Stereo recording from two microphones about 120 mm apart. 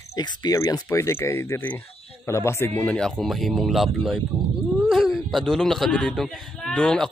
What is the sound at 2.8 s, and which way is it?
Speech, 10° left (ahead or behind).